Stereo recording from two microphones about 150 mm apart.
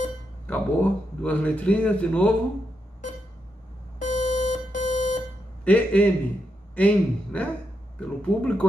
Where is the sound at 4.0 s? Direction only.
60° left (ahead or behind).